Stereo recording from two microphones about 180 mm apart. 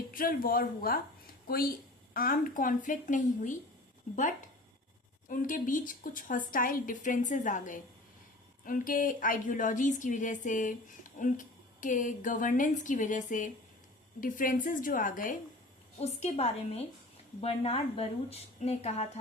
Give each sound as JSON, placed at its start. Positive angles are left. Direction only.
{"t": 0.1, "sound": "speech", "side_deg": 50}
{"t": 16.0, "sound": "a woman's voice", "side_deg": 35}